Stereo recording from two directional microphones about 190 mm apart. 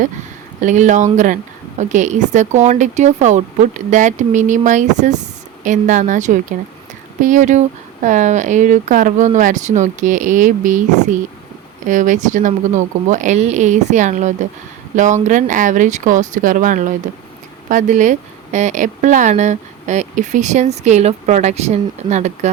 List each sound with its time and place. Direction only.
0.6 s a woman's voice: 40° right (ahead or behind)
11.9 s a woman's voice: 40° right (ahead or behind)